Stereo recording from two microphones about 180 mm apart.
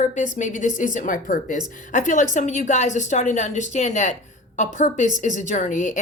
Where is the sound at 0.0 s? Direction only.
45° left (ahead or behind).